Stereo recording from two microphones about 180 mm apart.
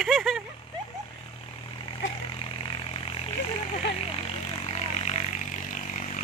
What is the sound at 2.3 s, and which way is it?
Vehicle, 30° left (ahead or behind).